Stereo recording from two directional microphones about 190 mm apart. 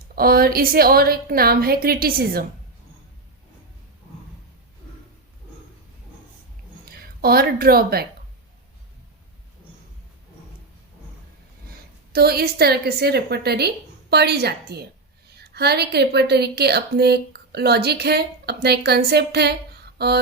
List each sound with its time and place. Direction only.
0.0 s a woman's voice: 50° right (ahead or behind)
6.8 s speech: 50° right (ahead or behind)
12.1 s a woman's voice: 55° right (ahead or behind)